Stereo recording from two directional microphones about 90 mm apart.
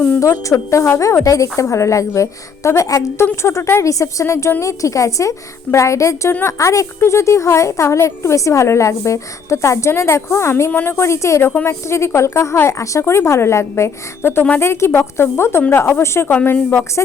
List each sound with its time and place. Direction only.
0.2 s a woman's voice: 35° left (ahead or behind)
10.7 s speech: 20° left (ahead or behind)
10.9 s a woman's voice: 30° left (ahead or behind)